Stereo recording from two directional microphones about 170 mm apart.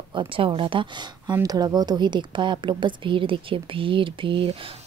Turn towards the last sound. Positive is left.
turn(degrees=-30)  # may be behind; listen again after turning